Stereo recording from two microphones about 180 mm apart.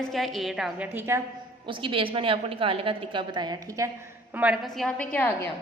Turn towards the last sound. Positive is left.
turn(degrees=10)  # may be behind; listen again after turning